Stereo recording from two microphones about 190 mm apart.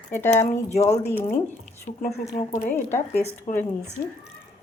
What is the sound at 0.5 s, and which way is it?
Speech, 35° left (ahead or behind).